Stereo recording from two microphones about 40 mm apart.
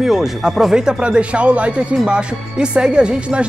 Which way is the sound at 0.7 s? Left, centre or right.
Right.